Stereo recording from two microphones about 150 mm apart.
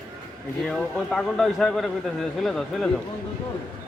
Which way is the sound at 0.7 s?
5° left (ahead or behind).